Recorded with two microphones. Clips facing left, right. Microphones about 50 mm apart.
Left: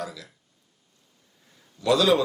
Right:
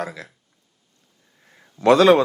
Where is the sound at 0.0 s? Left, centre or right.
Right.